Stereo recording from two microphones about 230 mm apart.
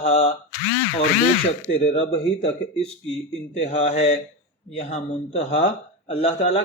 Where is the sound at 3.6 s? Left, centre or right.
Left.